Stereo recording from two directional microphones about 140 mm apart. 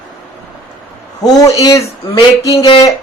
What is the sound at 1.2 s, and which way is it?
A man's voice, 25° left (ahead or behind).